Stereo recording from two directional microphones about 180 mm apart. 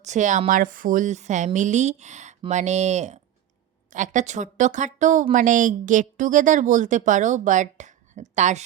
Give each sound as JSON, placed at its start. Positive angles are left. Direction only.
{"t": 0.0, "sound": "speech", "side_deg": -40}